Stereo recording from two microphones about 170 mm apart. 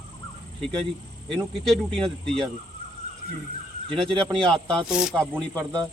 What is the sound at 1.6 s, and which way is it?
Speech, centre (ahead or behind).